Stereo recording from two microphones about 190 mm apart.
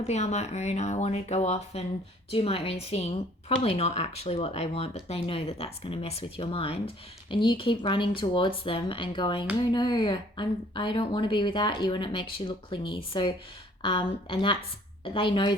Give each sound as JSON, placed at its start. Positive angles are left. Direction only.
{"t": 0.1, "sound": "a woman's voice", "side_deg": 35}